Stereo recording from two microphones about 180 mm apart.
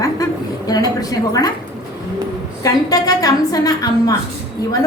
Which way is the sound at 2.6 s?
20° left (ahead or behind).